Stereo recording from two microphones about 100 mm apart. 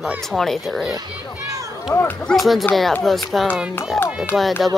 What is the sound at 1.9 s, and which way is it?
Speech, 30° left (ahead or behind).